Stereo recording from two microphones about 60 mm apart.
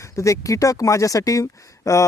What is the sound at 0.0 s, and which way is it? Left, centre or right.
Speech, left.